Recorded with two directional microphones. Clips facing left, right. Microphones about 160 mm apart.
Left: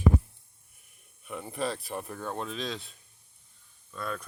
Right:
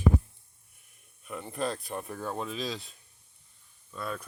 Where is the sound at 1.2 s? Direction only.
5° left (ahead or behind).